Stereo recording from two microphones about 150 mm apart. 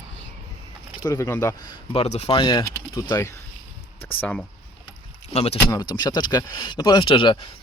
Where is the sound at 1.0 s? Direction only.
20° left (ahead or behind).